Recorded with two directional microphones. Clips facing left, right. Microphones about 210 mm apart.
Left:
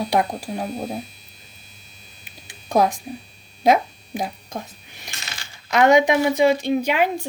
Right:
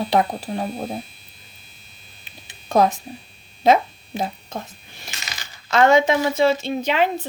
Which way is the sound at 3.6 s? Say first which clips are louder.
Right 1 dB; 15° left (ahead or behind).